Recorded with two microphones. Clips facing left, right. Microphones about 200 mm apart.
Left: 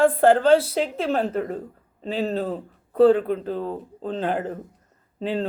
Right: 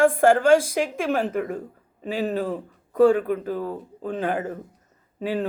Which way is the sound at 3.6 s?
25° left (ahead or behind).